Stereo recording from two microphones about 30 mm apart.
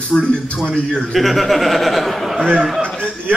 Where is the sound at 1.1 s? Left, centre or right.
Centre.